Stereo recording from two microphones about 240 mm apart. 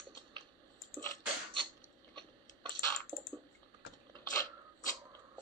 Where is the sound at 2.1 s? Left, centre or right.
Centre.